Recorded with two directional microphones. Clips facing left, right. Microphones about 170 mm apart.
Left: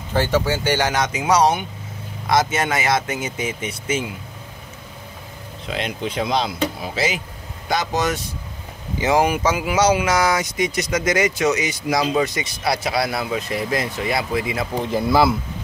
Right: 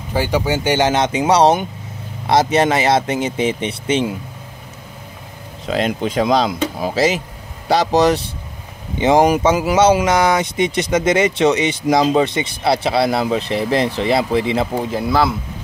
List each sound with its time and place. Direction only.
0.1 s speech: 15° right (ahead or behind); by 4.1 s 30° right (ahead or behind)
5.7 s speech: 45° right (ahead or behind)
14.8 s speech: centre (ahead or behind)